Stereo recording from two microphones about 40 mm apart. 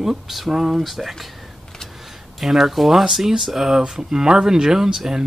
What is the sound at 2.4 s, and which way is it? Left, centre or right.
Speech, centre.